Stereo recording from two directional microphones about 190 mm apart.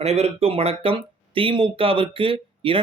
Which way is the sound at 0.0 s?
35° right (ahead or behind).